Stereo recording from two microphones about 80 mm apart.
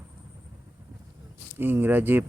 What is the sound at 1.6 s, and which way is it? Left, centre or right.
Speech, right.